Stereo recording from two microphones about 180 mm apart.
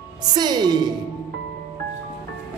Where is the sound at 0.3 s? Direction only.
25° right (ahead or behind).